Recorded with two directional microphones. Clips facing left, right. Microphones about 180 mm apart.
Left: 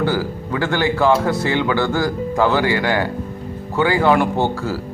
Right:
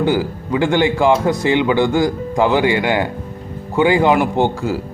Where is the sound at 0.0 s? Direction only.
15° right (ahead or behind).